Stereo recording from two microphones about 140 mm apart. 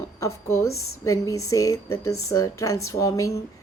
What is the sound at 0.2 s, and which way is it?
A woman's voice, 20° left (ahead or behind).